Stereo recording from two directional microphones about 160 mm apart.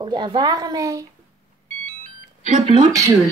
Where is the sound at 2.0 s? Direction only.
50° right (ahead or behind).